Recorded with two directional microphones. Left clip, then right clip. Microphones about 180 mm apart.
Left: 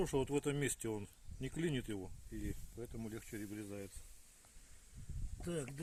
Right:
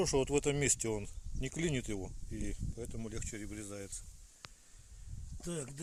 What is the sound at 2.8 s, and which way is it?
Speech, 35° right (ahead or behind).